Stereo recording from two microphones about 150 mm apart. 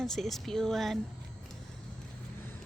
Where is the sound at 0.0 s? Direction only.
Centre (ahead or behind).